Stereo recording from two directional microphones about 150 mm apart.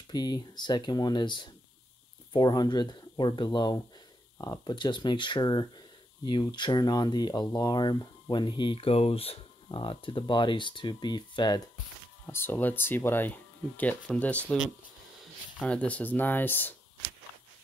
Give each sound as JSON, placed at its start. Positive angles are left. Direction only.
{"t": 0.1, "sound": "speech", "side_deg": 25}
{"t": 12.3, "sound": "speech", "side_deg": 15}
{"t": 15.6, "sound": "speech", "side_deg": 10}